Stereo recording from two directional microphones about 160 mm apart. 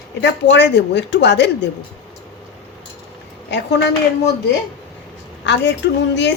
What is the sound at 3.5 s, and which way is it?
Speech, 90° left.